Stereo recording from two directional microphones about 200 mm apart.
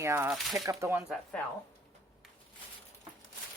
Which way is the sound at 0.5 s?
15° right (ahead or behind).